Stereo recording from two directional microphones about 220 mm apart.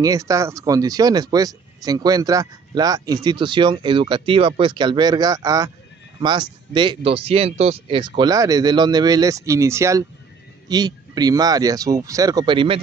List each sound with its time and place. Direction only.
0.0 s speech: 15° right (ahead or behind)